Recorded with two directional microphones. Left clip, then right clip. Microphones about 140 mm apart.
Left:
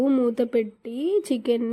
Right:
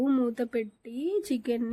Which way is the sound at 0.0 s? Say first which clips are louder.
Left 6 dB; 10° left (ahead or behind).